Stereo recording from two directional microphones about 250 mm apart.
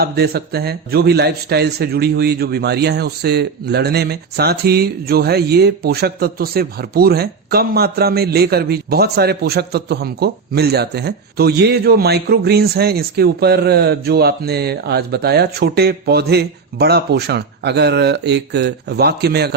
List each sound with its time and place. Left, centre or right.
0.0 s speech: right